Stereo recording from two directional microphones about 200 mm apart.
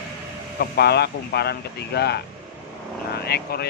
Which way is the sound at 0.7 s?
55° left (ahead or behind).